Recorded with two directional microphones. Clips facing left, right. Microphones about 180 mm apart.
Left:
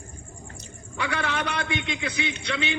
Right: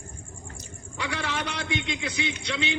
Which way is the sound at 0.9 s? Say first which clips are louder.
Left 3 dB; 55° left (ahead or behind).